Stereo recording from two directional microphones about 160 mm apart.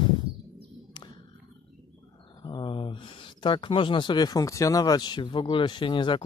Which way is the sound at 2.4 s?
30° left (ahead or behind).